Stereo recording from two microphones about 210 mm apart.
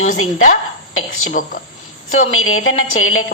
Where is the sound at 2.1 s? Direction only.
75° left (ahead or behind).